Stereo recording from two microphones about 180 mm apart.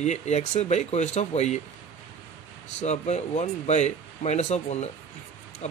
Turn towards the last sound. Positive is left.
turn(degrees=40)  # may be behind; listen again after turning